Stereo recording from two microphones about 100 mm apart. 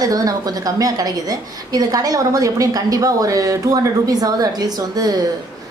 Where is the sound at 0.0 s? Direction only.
40° right (ahead or behind).